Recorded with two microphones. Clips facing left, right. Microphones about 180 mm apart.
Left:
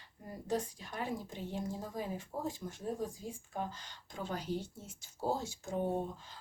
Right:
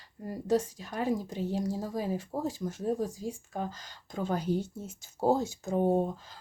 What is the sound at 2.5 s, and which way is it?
A woman's voice, 90° right.